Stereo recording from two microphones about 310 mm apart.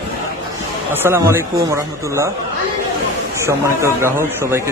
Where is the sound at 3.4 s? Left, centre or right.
Centre.